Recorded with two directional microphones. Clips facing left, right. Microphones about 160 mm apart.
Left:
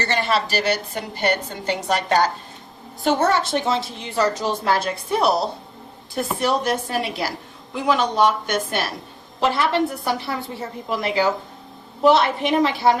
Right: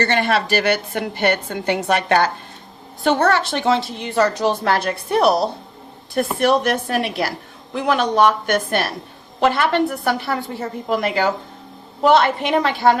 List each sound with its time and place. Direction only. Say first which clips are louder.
0.0 s a woman's voice: right 3 dB; 55° right (ahead or behind)